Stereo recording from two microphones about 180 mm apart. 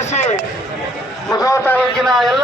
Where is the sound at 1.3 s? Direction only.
20° left (ahead or behind).